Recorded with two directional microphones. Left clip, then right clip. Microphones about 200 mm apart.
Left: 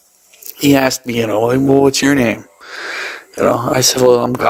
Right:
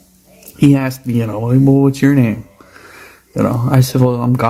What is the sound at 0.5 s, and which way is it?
Speech, 45° left (ahead or behind).